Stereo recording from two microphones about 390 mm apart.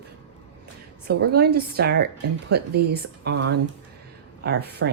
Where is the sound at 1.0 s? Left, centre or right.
Right.